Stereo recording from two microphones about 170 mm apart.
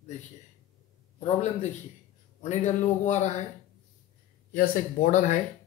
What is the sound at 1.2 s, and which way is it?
Speech, 40° left (ahead or behind).